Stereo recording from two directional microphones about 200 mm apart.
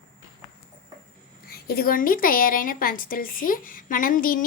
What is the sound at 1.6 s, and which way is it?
A woman's voice, 50° left (ahead or behind).